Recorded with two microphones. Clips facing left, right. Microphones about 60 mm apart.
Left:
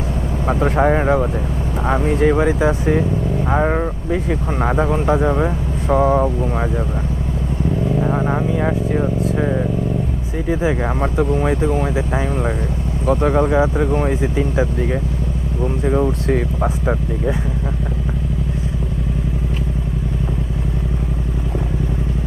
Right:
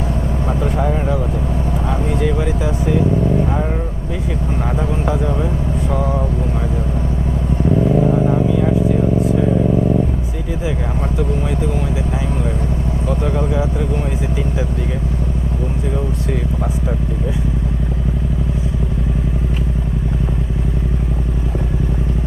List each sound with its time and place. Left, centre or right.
0.4 s speech: left
1.9 s speech: left
7.7 s vehicle: centre
8.0 s vehicle: left
10.5 s speech: left
15.9 s speech: left